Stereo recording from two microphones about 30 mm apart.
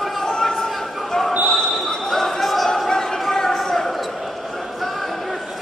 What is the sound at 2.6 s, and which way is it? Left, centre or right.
Chatter, centre.